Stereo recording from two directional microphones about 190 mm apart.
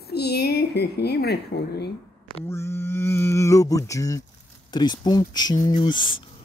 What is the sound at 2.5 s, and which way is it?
Speech, 15° left (ahead or behind).